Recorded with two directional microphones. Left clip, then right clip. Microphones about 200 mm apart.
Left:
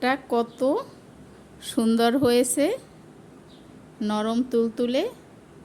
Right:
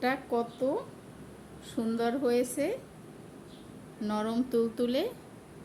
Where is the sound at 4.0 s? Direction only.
40° left (ahead or behind).